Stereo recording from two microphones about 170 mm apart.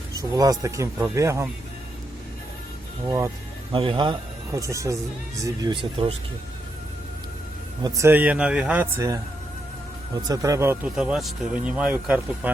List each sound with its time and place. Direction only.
0.1 s speech: 20° right (ahead or behind)
3.7 s speech: 30° right (ahead or behind)
7.8 s speech: 20° right (ahead or behind)
10.9 s speech: 5° right (ahead or behind)